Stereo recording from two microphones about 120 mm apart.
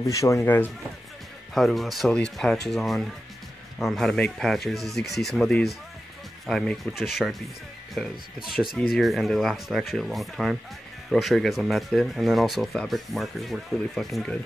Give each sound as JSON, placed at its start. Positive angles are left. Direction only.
{"t": 0.0, "sound": "speech", "side_deg": 25}
{"t": 1.5, "sound": "speech", "side_deg": 0}